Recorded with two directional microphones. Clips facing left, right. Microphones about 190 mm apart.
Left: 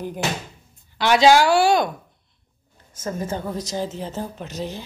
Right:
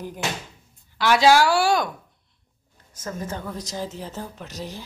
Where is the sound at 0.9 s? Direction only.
25° left (ahead or behind).